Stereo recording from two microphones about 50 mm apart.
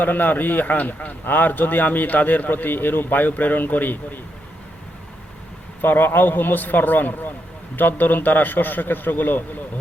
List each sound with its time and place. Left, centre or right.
0.0 s a man's voice: left
5.8 s a man's voice: left